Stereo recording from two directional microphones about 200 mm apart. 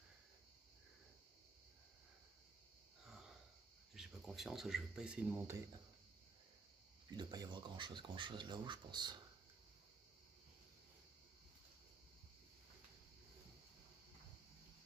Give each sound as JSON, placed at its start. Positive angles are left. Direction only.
{"t": 3.9, "sound": "speech", "side_deg": 0}
{"t": 7.1, "sound": "speech", "side_deg": -20}